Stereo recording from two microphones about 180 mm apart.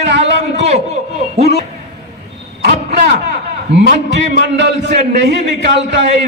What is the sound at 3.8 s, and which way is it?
A man's voice, 65° right (ahead or behind).